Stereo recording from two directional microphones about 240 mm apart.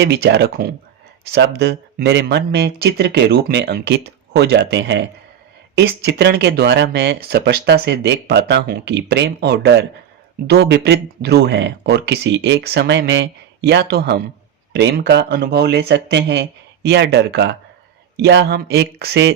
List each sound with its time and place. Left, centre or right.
0.0 s speech: right